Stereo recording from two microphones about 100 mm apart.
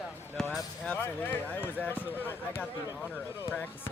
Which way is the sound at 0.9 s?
20° left (ahead or behind).